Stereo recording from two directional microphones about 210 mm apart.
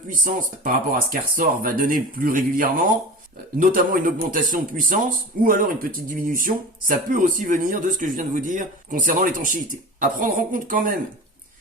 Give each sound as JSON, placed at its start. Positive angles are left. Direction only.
{"t": 0.1, "sound": "speech", "side_deg": -40}